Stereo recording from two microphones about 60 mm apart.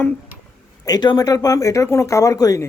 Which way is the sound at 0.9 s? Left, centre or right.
Left.